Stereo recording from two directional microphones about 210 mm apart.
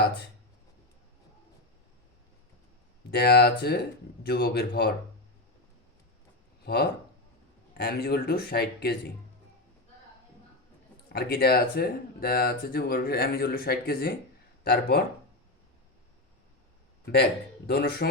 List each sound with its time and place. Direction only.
3.1 s speech: 50° left (ahead or behind)
6.7 s speech: 50° left (ahead or behind)
11.1 s speech: 50° left (ahead or behind)
17.7 s speech: 50° left (ahead or behind)